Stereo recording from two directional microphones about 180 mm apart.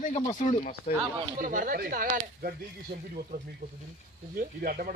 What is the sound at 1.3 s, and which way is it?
Speech, 50° right (ahead or behind).